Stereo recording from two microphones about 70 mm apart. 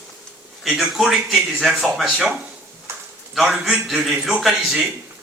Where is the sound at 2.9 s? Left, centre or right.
Right.